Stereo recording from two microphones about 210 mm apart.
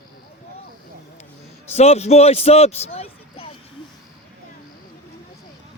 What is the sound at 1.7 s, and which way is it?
A man's voice, 30° left (ahead or behind).